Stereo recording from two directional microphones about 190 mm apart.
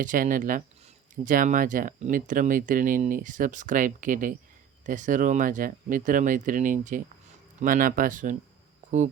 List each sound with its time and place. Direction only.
0.0 s speech: 45° right (ahead or behind)